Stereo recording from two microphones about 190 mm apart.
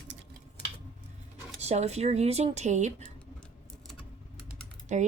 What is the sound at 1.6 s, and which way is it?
A woman's voice, 35° right (ahead or behind).